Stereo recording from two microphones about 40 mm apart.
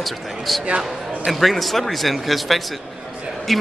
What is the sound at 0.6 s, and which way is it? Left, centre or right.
Speech, right.